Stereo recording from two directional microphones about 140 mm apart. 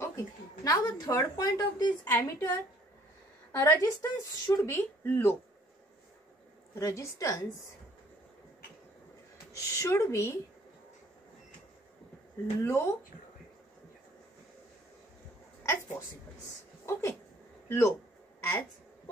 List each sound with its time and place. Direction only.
0.7 s a woman's voice: 25° left (ahead or behind)
2.0 s speech: 15° left (ahead or behind)
3.5 s speech: 20° left (ahead or behind)
6.7 s a woman's voice: 20° left (ahead or behind)
9.6 s a woman's voice: 20° left (ahead or behind)
12.6 s a woman's voice: 20° left (ahead or behind)
15.6 s speech: 15° left (ahead or behind)